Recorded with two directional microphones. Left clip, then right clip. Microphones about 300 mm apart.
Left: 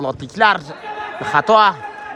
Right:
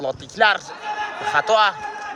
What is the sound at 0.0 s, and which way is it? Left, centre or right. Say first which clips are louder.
A man's voice: left 3 dB; centre.